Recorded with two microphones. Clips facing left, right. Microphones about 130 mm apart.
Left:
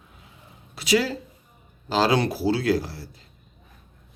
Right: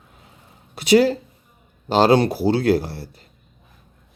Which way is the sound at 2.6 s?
60° right (ahead or behind).